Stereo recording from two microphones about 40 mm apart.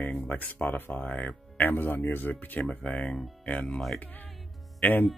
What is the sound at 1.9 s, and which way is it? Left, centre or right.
Speech, left.